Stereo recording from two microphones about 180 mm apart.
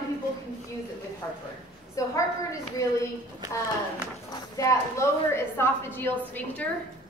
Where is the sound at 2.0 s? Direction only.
20° left (ahead or behind).